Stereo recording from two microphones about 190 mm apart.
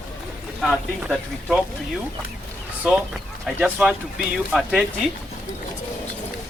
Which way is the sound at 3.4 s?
Centre (ahead or behind).